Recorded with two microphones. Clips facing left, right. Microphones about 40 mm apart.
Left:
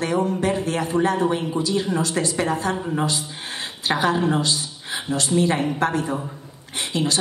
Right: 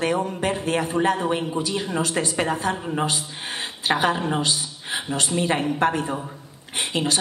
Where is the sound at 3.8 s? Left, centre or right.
Right.